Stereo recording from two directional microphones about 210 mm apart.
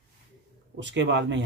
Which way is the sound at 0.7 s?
60° right (ahead or behind).